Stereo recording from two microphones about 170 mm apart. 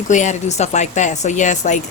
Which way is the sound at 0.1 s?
45° left (ahead or behind).